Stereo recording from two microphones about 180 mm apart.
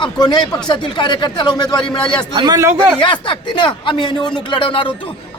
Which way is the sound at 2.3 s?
20° right (ahead or behind).